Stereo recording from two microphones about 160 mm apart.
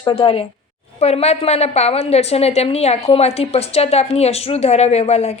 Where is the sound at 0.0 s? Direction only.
35° left (ahead or behind).